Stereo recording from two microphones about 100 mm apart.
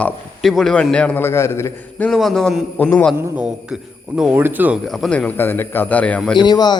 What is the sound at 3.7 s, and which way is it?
Speech, 5° right (ahead or behind).